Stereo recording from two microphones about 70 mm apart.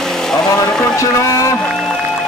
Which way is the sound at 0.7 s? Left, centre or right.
Centre.